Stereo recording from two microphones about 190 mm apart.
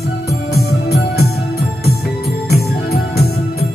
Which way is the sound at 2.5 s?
55° left (ahead or behind).